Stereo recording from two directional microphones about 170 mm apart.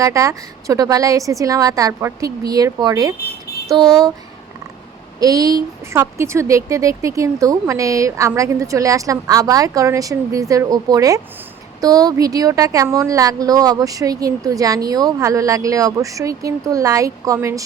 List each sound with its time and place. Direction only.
0.0 s speech: 20° right (ahead or behind)
5.2 s a woman's voice: 20° right (ahead or behind)